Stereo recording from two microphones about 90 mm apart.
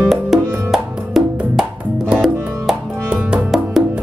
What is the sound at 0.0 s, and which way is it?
Music, centre (ahead or behind).